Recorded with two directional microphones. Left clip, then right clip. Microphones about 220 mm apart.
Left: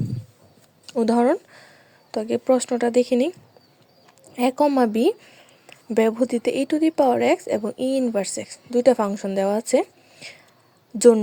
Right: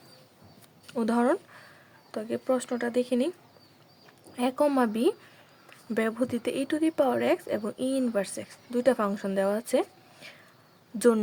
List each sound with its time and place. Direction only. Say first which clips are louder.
0.9 s a sound: left 7 dB; 20° left (ahead or behind)
2.1 s a woman's voice: left 8 dB; 25° left (ahead or behind)
4.4 s a woman's voice: left 6 dB; 20° left (ahead or behind)